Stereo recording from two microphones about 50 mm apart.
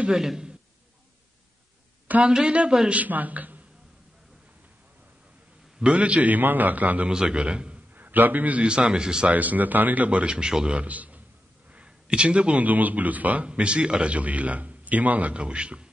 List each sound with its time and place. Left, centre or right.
0.1 s a man's voice: centre
2.2 s a man's voice: centre
2.9 s a man's voice: right
5.8 s a man's voice: right
7.1 s a man's voice: centre
7.9 s a man's voice: right
8.6 s a man's voice: centre
9.3 s a man's voice: right
10.3 s a man's voice: centre
10.8 s a man's voice: right
12.1 s a man's voice: centre
12.6 s a man's voice: right
13.5 s a man's voice: right